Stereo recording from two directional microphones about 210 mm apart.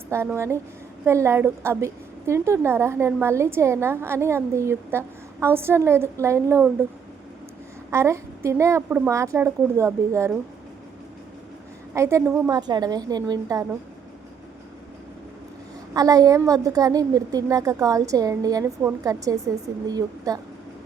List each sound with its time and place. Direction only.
0.1 s a woman's voice: 10° right (ahead or behind)
7.9 s a woman's voice: 15° right (ahead or behind)
11.9 s a woman's voice: 15° right (ahead or behind)
16.0 s a woman's voice: 15° right (ahead or behind)